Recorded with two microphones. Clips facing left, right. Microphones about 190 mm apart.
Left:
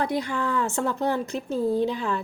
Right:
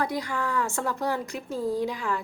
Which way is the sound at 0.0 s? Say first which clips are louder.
Left 3 dB; 20° left (ahead or behind).